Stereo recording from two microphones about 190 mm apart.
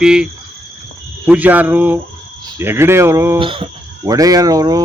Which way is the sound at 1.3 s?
10° right (ahead or behind).